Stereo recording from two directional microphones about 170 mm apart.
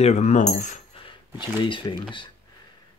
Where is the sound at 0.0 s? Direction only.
40° left (ahead or behind).